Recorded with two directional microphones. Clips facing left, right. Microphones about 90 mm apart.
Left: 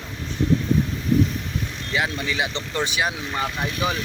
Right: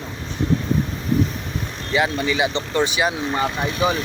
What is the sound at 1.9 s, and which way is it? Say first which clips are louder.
Speech: right 5 dB; centre (ahead or behind).